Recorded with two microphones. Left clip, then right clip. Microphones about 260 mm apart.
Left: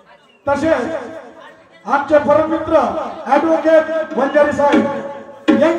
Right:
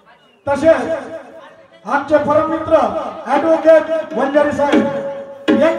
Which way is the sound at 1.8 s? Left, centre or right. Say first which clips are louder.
Left 1 dB; right.